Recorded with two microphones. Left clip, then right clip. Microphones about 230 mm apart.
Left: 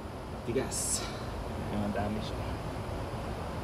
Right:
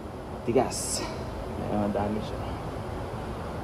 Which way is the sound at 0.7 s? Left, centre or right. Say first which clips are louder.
Right 3 dB; centre.